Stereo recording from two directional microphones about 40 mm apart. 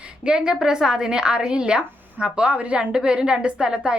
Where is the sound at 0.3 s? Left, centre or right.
Centre.